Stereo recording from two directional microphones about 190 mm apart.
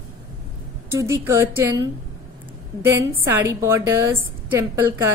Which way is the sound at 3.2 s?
15° right (ahead or behind).